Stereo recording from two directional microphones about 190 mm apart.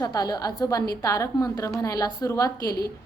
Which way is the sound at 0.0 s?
20° left (ahead or behind).